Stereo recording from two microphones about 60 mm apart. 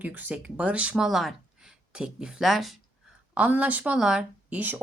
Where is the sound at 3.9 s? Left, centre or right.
Centre.